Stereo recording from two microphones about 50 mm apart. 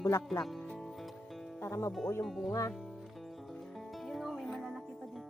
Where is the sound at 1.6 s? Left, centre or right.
Left.